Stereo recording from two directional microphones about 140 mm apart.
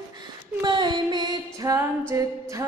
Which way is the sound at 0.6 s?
35° right (ahead or behind).